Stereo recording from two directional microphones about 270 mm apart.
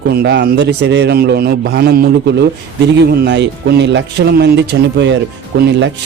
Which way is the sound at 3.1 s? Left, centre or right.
Right.